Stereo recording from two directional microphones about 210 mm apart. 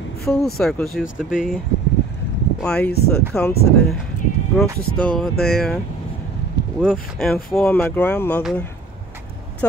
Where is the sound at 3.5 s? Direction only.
50° left (ahead or behind).